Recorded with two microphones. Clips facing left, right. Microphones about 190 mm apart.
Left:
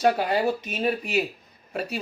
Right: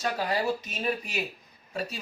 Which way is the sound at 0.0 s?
60° left (ahead or behind).